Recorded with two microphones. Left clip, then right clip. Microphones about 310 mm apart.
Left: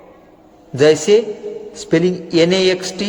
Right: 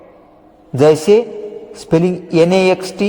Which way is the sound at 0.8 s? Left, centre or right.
Centre.